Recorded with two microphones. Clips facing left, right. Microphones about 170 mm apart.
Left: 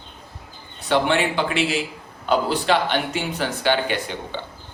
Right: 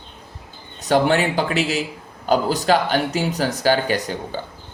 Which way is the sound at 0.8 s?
40° right (ahead or behind).